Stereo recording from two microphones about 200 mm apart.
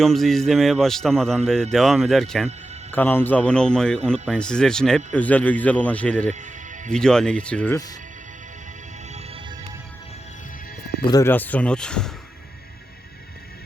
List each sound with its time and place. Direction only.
0.0 s a man's voice: centre (ahead or behind)
6.3 s music: 35° right (ahead or behind)
6.9 s a man's voice: 5° left (ahead or behind)
9.1 s music: 30° right (ahead or behind)
11.0 s speech: 15° left (ahead or behind)